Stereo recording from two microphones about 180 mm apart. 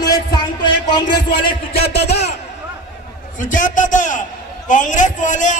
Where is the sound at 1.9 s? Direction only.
65° left (ahead or behind).